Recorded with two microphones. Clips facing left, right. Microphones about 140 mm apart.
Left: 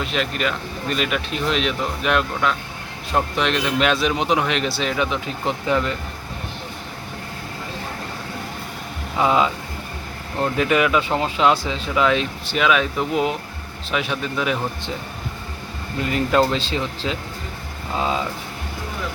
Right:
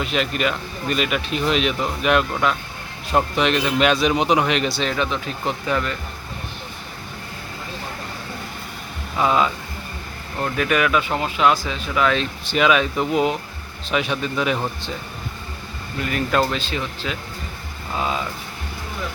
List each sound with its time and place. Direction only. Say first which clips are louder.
0.0 s a man's voice: right 1 dB; 5° right (ahead or behind); by 5.9 s 20° left (ahead or behind)
9.1 s speech: left 1 dB; 20° left (ahead or behind)
12.5 s a man's voice: right 2 dB; centre (ahead or behind)
16.0 s speech: left 2 dB; 25° left (ahead or behind)